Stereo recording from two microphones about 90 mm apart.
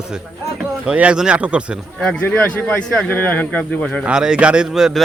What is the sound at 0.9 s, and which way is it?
Speech, 10° right (ahead or behind).